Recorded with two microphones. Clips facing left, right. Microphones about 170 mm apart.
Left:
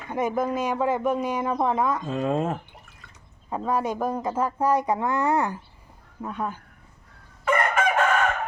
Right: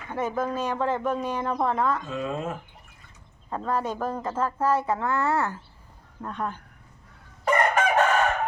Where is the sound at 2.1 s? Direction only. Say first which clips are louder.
Left 5 dB; 40° left (ahead or behind).